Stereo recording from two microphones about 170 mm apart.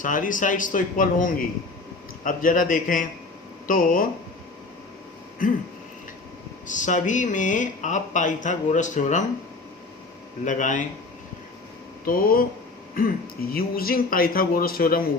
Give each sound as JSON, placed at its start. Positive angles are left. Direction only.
{"t": 0.0, "sound": "speech", "side_deg": 50}
{"t": 5.4, "sound": "speech", "side_deg": 50}
{"t": 6.7, "sound": "speech", "side_deg": 45}
{"t": 10.4, "sound": "speech", "side_deg": 50}
{"t": 12.0, "sound": "speech", "side_deg": 55}
{"t": 13.5, "sound": "speech", "side_deg": 60}